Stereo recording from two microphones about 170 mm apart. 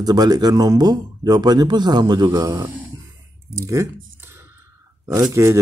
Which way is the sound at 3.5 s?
20° right (ahead or behind).